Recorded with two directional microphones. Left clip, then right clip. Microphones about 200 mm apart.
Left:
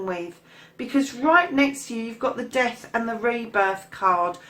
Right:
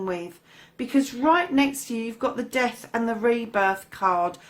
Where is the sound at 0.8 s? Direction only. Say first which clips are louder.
Even; 45° right (ahead or behind).